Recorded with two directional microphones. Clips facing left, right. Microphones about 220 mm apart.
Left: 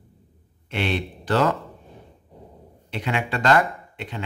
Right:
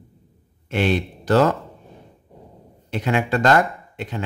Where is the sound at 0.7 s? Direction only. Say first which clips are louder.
Right 5 dB; 45° right (ahead or behind).